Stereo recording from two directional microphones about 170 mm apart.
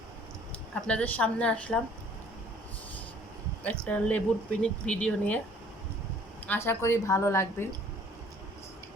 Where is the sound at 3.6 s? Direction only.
5° left (ahead or behind).